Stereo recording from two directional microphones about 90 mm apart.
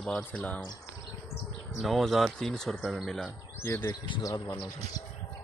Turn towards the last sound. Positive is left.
turn(degrees=50)  # may be behind; listen again after turning